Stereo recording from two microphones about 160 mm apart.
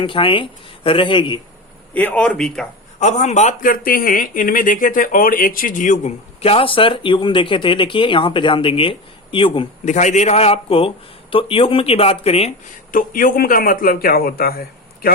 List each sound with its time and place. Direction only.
0.0 s speech: 30° left (ahead or behind)
1.9 s speech: 10° left (ahead or behind)
3.0 s speech: 45° left (ahead or behind)
9.8 s speech: 50° left (ahead or behind)
12.9 s a man's voice: 60° left (ahead or behind)